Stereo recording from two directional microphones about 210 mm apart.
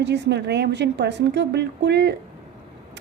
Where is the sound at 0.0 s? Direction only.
55° right (ahead or behind).